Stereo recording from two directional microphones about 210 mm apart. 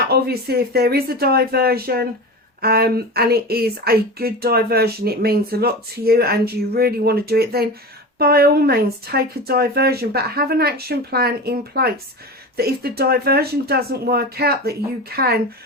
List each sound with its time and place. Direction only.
0.1 s speech: 50° right (ahead or behind)